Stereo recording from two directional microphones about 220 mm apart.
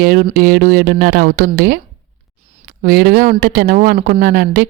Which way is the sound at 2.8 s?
45° right (ahead or behind).